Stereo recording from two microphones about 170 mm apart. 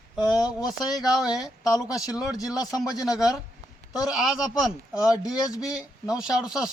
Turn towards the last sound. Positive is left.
turn(degrees=-5)  # may be behind; listen again after turning